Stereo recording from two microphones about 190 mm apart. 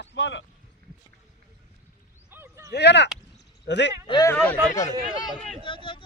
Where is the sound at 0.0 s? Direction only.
70° left (ahead or behind).